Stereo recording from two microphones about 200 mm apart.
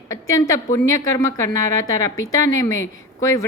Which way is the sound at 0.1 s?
15° left (ahead or behind).